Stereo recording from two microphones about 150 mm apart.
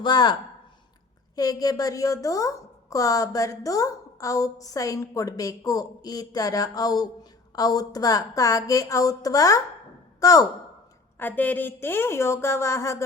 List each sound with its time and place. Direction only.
0.0 s a woman's voice: 30° left (ahead or behind)
1.4 s a woman's voice: 25° left (ahead or behind)
11.2 s a woman's voice: 10° left (ahead or behind)